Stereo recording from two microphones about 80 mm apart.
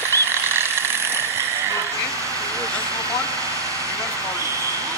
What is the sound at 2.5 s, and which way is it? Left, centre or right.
Vehicle, right.